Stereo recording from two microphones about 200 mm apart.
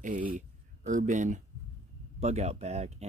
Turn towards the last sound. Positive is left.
turn(degrees=-35)  # may be behind; listen again after turning